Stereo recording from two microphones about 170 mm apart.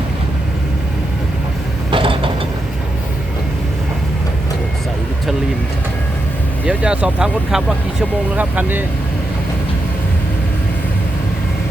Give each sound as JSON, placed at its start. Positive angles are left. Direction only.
{"t": 1.9, "sound": "mechanisms", "side_deg": -30}
{"t": 6.7, "sound": "speech", "side_deg": -5}